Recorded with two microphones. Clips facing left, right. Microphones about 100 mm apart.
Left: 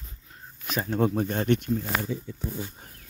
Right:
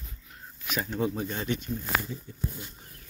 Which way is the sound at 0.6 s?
35° left (ahead or behind).